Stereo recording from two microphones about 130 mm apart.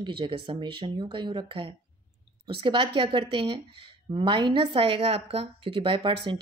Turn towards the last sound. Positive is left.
turn(degrees=-40)  # may be behind; listen again after turning